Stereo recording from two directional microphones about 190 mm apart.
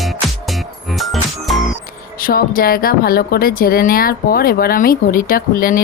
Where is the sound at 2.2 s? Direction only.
50° left (ahead or behind).